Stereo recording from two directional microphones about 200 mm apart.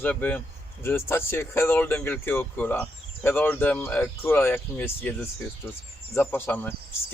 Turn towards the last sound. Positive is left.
turn(degrees=10)  # may be behind; listen again after turning